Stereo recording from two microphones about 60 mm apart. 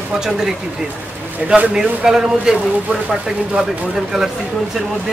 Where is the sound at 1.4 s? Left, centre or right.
Centre.